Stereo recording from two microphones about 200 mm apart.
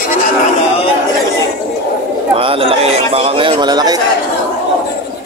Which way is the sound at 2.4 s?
25° right (ahead or behind).